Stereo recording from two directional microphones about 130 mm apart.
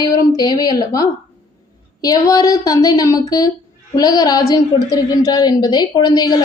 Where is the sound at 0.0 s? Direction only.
30° left (ahead or behind).